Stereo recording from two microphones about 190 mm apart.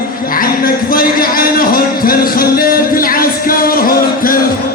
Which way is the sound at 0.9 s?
50° left (ahead or behind).